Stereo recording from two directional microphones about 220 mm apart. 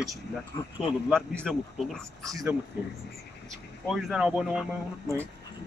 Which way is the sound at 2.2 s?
15° right (ahead or behind).